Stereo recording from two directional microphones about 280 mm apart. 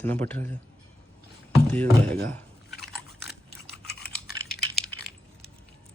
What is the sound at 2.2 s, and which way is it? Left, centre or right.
Chewing, centre.